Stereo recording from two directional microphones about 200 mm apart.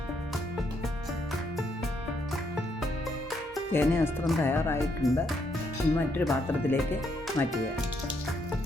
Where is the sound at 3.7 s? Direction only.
10° left (ahead or behind).